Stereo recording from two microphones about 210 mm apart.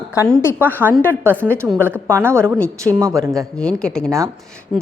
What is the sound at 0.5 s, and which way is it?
Speech, 10° right (ahead or behind).